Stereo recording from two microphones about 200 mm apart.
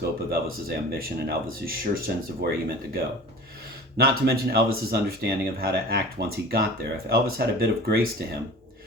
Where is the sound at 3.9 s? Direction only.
50° right (ahead or behind).